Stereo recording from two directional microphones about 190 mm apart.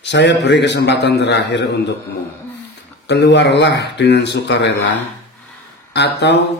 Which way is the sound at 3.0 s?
65° left (ahead or behind).